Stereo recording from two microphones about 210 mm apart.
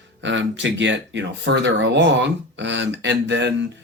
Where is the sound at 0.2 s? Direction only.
60° right (ahead or behind).